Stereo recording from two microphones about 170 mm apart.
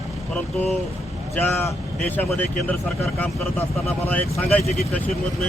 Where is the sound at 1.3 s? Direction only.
10° left (ahead or behind).